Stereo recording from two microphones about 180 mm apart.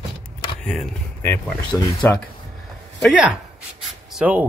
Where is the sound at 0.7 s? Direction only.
5° left (ahead or behind).